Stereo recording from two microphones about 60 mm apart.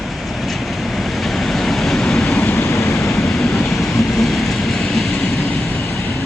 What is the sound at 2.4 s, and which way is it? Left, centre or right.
Vehicle, left.